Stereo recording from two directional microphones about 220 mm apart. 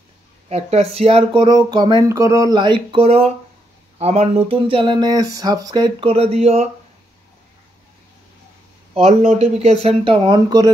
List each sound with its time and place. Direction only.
0.5 s speech: 30° right (ahead or behind)
8.9 s speech: 30° right (ahead or behind)